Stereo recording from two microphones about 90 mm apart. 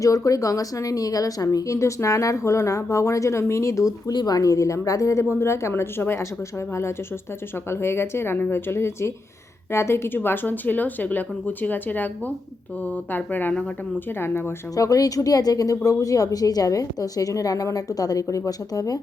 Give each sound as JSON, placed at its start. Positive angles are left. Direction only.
{"t": 0.0, "sound": "speech", "side_deg": 40}
{"t": 4.1, "sound": "speech", "side_deg": 50}
{"t": 7.7, "sound": "speech", "side_deg": 25}
{"t": 14.8, "sound": "speech", "side_deg": 40}